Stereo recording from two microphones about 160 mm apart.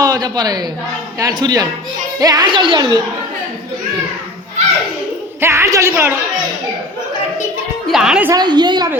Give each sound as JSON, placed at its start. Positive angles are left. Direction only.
{"t": 0.0, "sound": "a woman's voice", "side_deg": -25}
{"t": 5.4, "sound": "a woman's voice", "side_deg": -15}
{"t": 7.9, "sound": "a woman's voice", "side_deg": -5}
{"t": 8.3, "sound": "speech", "side_deg": -25}